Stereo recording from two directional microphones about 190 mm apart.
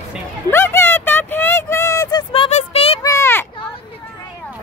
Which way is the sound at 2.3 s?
35° left (ahead or behind).